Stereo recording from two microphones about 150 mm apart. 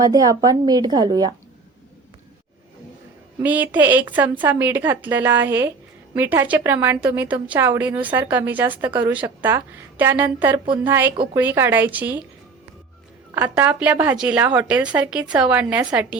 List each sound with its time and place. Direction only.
0.0 s a woman's voice: 25° right (ahead or behind)
3.4 s a woman's voice: 10° right (ahead or behind)
13.3 s a woman's voice: 10° right (ahead or behind)